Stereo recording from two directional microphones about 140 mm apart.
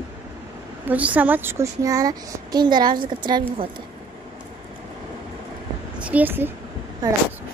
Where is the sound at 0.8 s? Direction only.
10° right (ahead or behind); by 3.6 s 35° right (ahead or behind).